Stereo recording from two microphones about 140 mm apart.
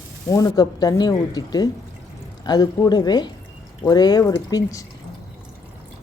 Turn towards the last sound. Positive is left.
turn(degrees=25)  # may be behind; listen again after turning